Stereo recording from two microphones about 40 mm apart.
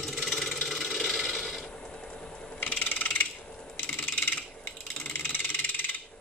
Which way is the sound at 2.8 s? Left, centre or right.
Left.